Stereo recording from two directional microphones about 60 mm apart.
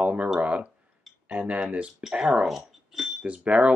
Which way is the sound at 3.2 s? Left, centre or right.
Right.